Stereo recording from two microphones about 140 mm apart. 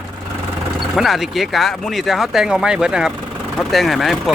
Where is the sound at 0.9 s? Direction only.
Centre (ahead or behind).